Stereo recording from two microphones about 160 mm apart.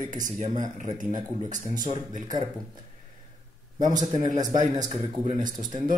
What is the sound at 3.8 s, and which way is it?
Speech, 50° right (ahead or behind).